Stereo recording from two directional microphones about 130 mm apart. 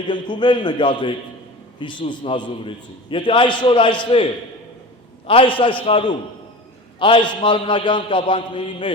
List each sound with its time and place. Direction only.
0.1 s a man's voice: 35° left (ahead or behind)
5.2 s a man's voice: 45° left (ahead or behind)